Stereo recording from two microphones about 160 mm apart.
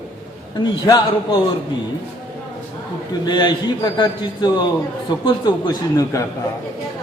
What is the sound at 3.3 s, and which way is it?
A man's voice, 25° left (ahead or behind).